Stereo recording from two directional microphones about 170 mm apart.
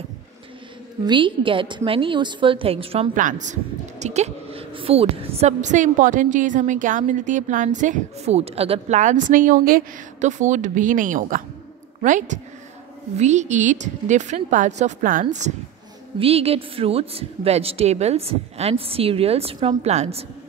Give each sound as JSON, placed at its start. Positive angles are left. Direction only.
{"t": 1.0, "sound": "a woman's voice", "side_deg": -30}
{"t": 3.2, "sound": "a woman's voice", "side_deg": -50}
{"t": 16.2, "sound": "a woman's voice", "side_deg": -35}